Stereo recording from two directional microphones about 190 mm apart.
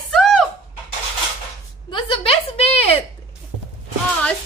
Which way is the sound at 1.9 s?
25° left (ahead or behind).